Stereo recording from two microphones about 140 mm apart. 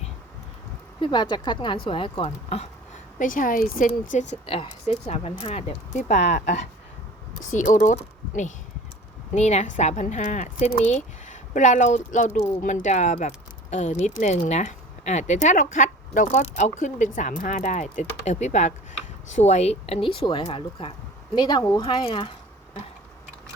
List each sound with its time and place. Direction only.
1.0 s speech: 35° left (ahead or behind)
2.2 s speech: 50° left (ahead or behind)
3.2 s speech: 70° left (ahead or behind)
4.4 s speech: 40° left (ahead or behind)
7.5 s speech: 65° left (ahead or behind); by 22.8 s 40° left (ahead or behind)